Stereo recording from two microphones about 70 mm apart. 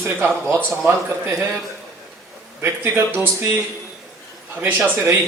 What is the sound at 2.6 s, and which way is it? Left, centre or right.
A man's voice, right.